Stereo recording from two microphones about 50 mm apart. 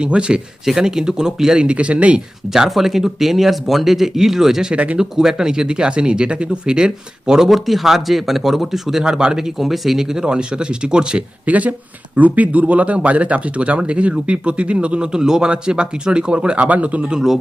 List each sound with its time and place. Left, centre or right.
0.0 s speech: centre
0.6 s speech: centre
1.5 s speech: right
2.5 s speech: centre
4.7 s speech: right
4.9 s speech: centre
7.4 s speech: centre
11.4 s speech: right
17.1 s speech: centre